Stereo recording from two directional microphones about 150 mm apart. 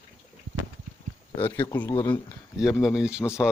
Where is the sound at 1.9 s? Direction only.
30° left (ahead or behind).